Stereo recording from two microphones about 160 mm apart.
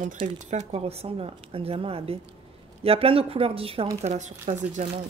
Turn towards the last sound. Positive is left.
turn(degrees=-50)  # may be behind; listen again after turning